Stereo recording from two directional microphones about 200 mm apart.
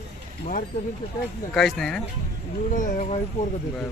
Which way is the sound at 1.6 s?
Centre (ahead or behind).